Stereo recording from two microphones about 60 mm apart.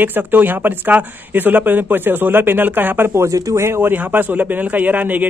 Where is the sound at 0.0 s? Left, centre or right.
Right.